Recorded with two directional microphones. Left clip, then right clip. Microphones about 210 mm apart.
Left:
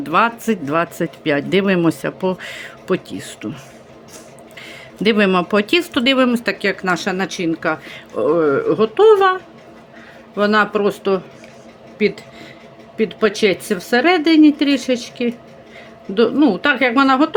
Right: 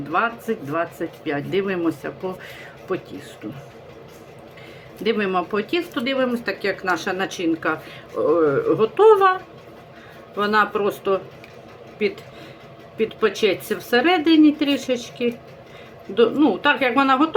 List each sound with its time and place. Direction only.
0.1 s speech: 55° left (ahead or behind)
5.0 s speech: 50° left (ahead or behind); by 17.3 s 30° left (ahead or behind)